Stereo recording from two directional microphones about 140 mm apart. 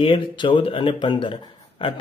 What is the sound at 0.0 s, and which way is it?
Speech, 35° left (ahead or behind).